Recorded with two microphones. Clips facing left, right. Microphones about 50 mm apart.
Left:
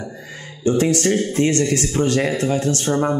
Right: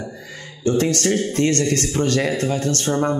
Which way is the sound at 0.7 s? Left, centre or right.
Centre.